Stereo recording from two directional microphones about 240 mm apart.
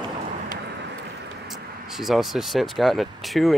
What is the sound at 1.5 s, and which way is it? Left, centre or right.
Speech, centre.